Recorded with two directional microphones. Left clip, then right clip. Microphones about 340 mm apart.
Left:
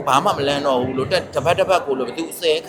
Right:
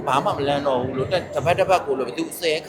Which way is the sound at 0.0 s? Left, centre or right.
Centre.